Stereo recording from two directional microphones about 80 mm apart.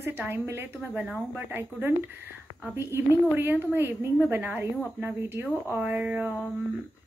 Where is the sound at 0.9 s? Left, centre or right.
Centre.